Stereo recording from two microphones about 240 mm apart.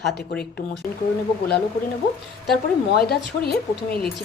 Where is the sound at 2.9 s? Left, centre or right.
Left.